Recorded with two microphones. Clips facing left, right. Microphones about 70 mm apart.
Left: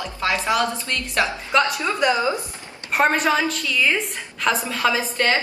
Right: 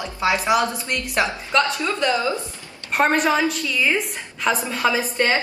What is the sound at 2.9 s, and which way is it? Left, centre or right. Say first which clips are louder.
Speech: even; centre.